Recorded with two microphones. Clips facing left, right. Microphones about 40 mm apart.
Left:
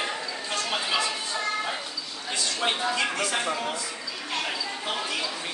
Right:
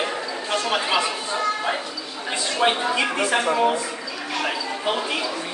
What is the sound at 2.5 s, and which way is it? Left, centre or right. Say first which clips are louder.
Speech: right 7 dB; right.